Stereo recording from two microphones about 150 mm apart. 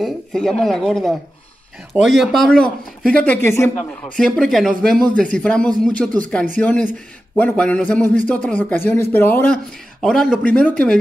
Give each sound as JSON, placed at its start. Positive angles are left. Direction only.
{"t": 0.0, "sound": "speech", "side_deg": 0}
{"t": 4.2, "sound": "speech", "side_deg": 0}